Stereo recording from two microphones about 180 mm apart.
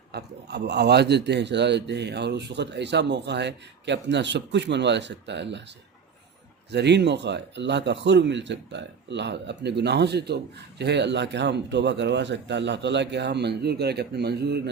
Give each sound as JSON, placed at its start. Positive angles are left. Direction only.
{"t": 0.1, "sound": "speech", "side_deg": -65}
{"t": 6.7, "sound": "speech", "side_deg": -70}